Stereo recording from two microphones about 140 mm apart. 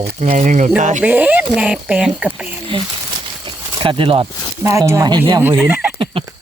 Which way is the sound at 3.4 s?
40° right (ahead or behind).